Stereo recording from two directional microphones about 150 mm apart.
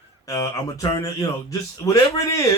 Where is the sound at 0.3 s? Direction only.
20° left (ahead or behind).